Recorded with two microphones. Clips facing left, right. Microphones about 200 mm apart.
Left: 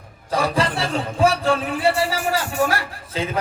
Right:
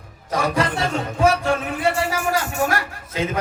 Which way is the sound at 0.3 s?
30° left (ahead or behind).